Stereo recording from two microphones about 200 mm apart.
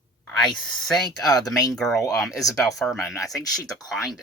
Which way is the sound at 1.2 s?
20° left (ahead or behind).